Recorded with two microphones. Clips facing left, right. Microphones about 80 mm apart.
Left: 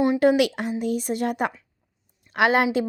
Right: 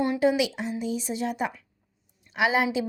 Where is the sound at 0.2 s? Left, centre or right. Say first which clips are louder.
Left 4 dB; left.